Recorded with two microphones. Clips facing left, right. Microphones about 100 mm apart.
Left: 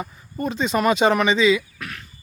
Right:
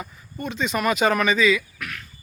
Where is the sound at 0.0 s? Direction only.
35° left (ahead or behind).